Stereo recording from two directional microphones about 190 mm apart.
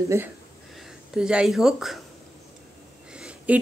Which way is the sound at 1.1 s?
5° right (ahead or behind).